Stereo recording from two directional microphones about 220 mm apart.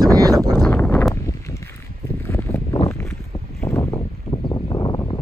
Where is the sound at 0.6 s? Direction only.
5° left (ahead or behind).